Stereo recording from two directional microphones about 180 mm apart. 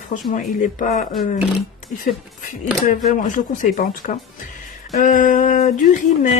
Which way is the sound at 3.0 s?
45° left (ahead or behind).